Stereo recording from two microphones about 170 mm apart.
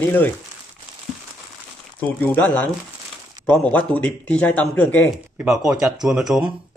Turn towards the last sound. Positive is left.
turn(degrees=-5)  # may be behind; listen again after turning